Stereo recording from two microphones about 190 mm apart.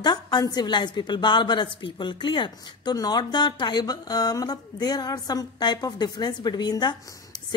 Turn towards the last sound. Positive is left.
turn(degrees=20)  # may be behind; listen again after turning